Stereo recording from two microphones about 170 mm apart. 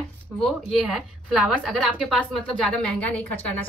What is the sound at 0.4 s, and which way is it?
A woman's voice, centre (ahead or behind).